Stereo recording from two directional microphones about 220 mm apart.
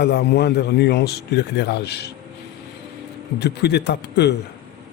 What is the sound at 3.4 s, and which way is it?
Speech, 50° left (ahead or behind).